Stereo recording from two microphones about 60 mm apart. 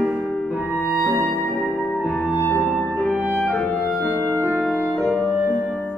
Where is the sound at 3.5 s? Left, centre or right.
Left.